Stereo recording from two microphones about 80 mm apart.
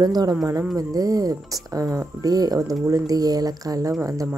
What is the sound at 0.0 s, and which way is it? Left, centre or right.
Speech, right.